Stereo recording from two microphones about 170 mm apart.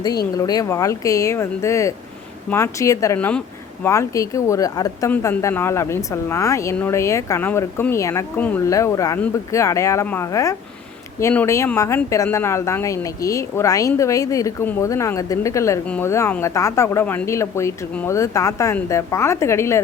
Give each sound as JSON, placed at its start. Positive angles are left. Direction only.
{"t": 0.3, "sound": "speech", "side_deg": 20}